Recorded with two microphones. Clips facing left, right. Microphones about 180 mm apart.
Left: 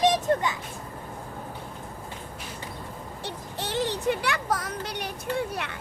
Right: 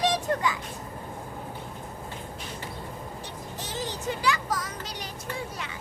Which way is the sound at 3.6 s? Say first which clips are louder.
Left 7 dB; 65° left (ahead or behind).